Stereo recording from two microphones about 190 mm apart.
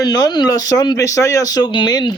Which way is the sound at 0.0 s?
20° left (ahead or behind).